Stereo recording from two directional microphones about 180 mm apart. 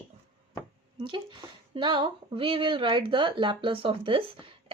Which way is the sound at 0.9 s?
25° right (ahead or behind).